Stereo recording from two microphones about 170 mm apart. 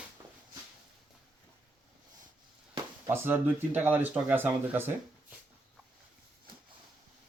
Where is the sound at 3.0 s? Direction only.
10° right (ahead or behind).